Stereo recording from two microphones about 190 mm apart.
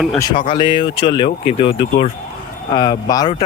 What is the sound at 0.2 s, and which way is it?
Speech, 25° left (ahead or behind).